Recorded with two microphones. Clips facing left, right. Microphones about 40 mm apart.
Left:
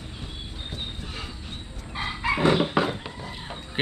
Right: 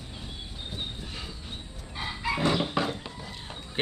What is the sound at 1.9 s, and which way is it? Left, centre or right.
Chicken, left.